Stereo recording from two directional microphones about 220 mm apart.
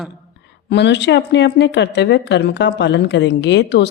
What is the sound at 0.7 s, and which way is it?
A woman's voice, 50° left (ahead or behind).